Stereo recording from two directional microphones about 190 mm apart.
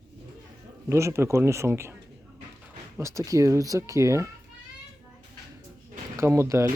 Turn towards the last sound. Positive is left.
turn(degrees=-15)  # may be behind; listen again after turning